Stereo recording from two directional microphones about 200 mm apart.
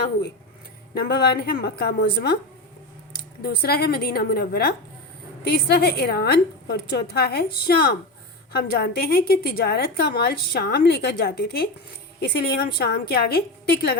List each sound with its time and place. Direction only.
0.9 s a woman's voice: 50° left (ahead or behind)
3.4 s a woman's voice: 50° left (ahead or behind)